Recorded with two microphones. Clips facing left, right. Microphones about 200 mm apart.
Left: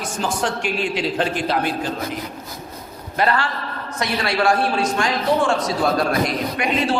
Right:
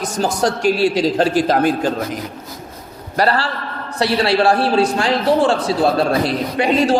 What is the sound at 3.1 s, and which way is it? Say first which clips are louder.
Speech: right 3 dB; 35° right (ahead or behind).